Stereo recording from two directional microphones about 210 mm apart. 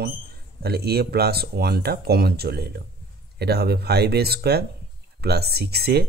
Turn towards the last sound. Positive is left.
turn(degrees=-50)  # may be behind; listen again after turning